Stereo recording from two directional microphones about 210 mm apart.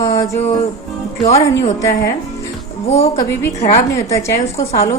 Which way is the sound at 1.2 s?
30° left (ahead or behind).